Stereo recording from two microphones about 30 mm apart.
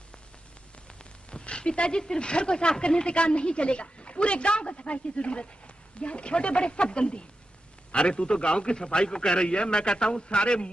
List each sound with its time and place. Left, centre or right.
1.3 s a woman's voice: left
10.2 s a woman's voice: left